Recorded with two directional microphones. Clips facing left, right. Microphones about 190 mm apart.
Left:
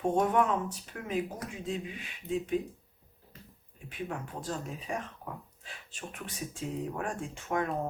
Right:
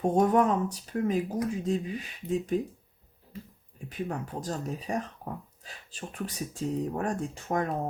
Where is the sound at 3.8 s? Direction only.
40° right (ahead or behind).